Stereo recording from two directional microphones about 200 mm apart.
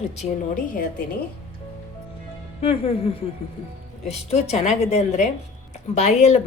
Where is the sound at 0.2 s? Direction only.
40° left (ahead or behind).